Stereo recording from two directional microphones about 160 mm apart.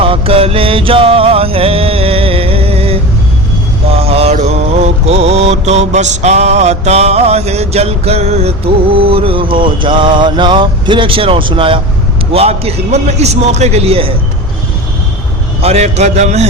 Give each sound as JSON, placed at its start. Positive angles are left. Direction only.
{"t": 0.0, "sound": "music", "side_deg": -35}
{"t": 4.0, "sound": "mantra", "side_deg": -40}
{"t": 15.6, "sound": "a man's voice", "side_deg": -45}